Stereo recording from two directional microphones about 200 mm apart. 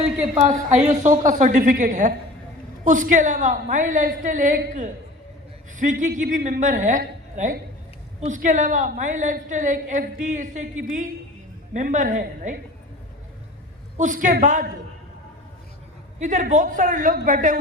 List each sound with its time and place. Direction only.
1.0 s a woman's voice: 40° right (ahead or behind)
13.9 s a woman's voice: 40° right (ahead or behind)
16.2 s a woman's voice: 35° right (ahead or behind)